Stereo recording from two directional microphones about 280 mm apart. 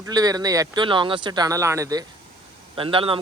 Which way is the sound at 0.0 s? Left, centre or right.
Centre.